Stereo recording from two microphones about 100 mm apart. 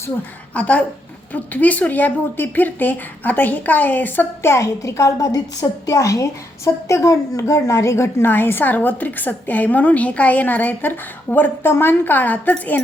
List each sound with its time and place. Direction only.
0.5 s a woman's voice: 15° left (ahead or behind)